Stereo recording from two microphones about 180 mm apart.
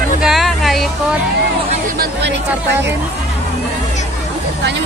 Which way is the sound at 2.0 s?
75° right (ahead or behind).